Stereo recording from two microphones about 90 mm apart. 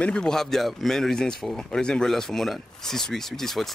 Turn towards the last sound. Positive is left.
turn(degrees=5)  # may be behind; listen again after turning